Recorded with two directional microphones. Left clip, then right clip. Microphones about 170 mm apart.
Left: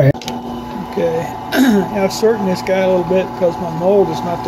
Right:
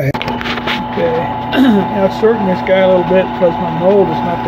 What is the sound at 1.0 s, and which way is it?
Speech, 20° left (ahead or behind).